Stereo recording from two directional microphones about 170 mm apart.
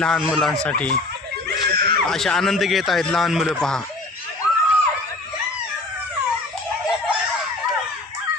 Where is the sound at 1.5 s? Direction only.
65° right (ahead or behind).